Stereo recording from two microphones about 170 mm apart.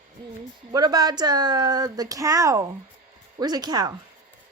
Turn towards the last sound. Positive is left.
turn(degrees=-25)  # may be behind; listen again after turning